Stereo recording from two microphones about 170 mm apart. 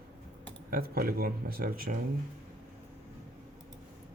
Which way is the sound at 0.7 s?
60° right (ahead or behind).